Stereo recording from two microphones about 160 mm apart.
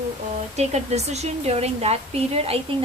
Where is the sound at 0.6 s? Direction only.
45° right (ahead or behind).